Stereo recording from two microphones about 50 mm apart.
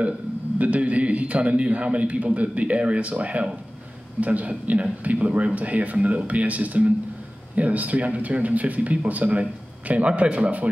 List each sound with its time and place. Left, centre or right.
0.6 s speech: right